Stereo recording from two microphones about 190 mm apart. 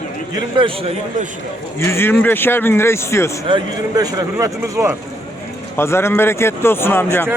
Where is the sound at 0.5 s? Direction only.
25° right (ahead or behind).